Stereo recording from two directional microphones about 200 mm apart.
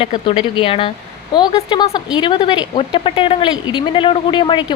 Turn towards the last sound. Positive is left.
turn(degrees=20)  # may be behind; listen again after turning